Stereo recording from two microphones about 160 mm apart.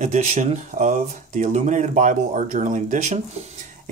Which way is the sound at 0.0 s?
50° right (ahead or behind).